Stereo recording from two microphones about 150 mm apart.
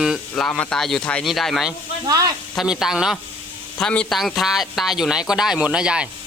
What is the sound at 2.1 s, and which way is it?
Speech, 25° right (ahead or behind).